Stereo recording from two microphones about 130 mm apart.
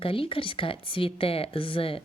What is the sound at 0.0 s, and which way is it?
Speech, 45° left (ahead or behind).